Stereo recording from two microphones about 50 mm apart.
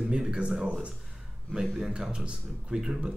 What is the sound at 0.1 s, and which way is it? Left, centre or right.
Speech, centre.